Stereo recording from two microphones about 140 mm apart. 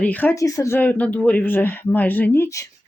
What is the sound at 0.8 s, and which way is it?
Speech, 10° left (ahead or behind).